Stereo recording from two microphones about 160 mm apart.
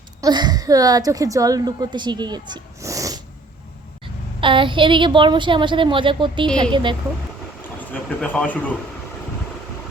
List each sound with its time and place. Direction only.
0.2 s a woman's voice: 25° right (ahead or behind)
4.4 s a woman's voice: 30° right (ahead or behind)
7.8 s a man's voice: 10° left (ahead or behind)